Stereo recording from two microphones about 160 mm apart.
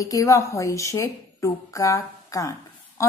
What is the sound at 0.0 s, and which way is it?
Speech, 20° left (ahead or behind).